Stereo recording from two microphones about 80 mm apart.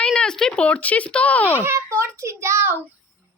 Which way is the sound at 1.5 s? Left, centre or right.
Right.